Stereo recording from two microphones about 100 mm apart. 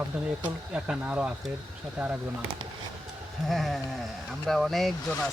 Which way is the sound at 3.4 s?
Centre (ahead or behind).